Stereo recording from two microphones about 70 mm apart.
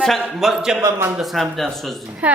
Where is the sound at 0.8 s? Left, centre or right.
Right.